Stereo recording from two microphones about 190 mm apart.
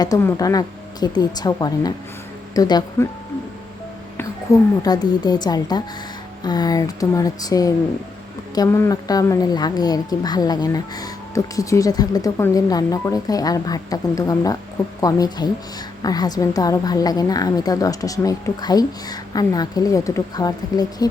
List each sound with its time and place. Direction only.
0.0 s a woman's voice: 15° left (ahead or behind)
4.8 s a woman's voice: 20° left (ahead or behind)